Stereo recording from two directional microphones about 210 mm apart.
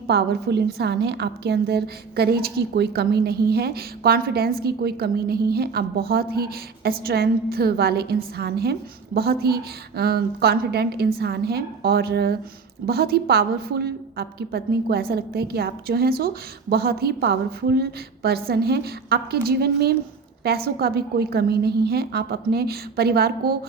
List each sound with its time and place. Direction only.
0.1 s a woman's voice: 50° right (ahead or behind)